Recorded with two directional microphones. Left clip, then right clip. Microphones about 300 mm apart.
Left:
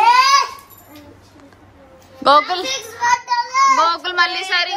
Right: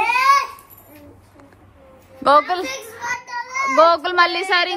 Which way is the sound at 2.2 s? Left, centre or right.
Centre.